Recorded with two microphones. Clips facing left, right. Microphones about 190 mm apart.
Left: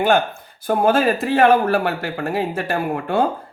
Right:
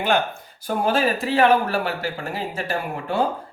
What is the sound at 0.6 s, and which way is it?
Speech, 55° left (ahead or behind).